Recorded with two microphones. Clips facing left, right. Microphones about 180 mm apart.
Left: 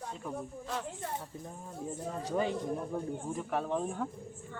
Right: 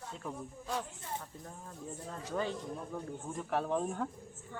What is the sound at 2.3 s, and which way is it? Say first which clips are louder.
Speech: left 4 dB; 15° left (ahead or behind).